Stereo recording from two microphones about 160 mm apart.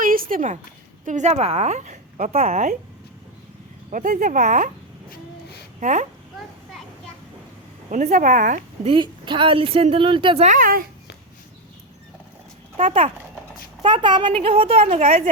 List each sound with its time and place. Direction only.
0.0 s a sound: 60° right (ahead or behind)
1.0 s a woman's voice: 50° right (ahead or behind)
3.8 s speech: 55° right (ahead or behind)
5.8 s a woman's voice: 50° right (ahead or behind)
7.9 s a woman's voice: 50° right (ahead or behind)
8.9 s speech: 30° right (ahead or behind)
10.4 s speech: 55° right (ahead or behind)
12.7 s a woman's voice: 45° right (ahead or behind)
13.8 s speech: 30° right (ahead or behind); by 15.3 s 45° right (ahead or behind)